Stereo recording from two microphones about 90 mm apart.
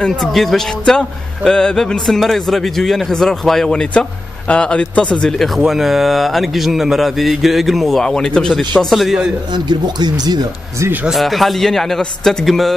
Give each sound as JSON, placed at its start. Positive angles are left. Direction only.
{"t": 0.0, "sound": "a man's voice", "side_deg": 5}
{"t": 9.5, "sound": "speech", "side_deg": -55}
{"t": 11.1, "sound": "a man's voice", "side_deg": 0}